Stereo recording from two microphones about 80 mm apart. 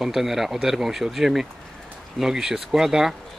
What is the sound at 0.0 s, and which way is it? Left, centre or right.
Speech, centre.